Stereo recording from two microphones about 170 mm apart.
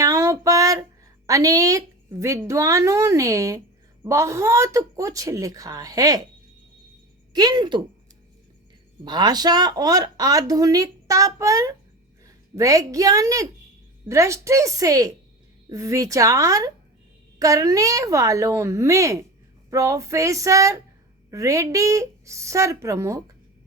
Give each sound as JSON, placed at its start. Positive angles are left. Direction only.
{"t": 0.0, "sound": "a sound", "side_deg": -20}
{"t": 1.3, "sound": "speech", "side_deg": -20}
{"t": 7.3, "sound": "speech", "side_deg": -25}
{"t": 9.0, "sound": "a woman's voice", "side_deg": -25}